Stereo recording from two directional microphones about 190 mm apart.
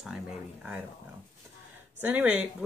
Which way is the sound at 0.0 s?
5° right (ahead or behind).